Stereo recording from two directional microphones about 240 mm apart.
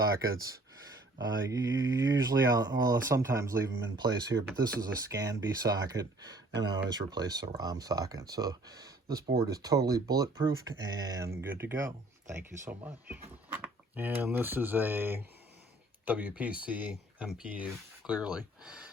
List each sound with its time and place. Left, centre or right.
0.0 s speech: centre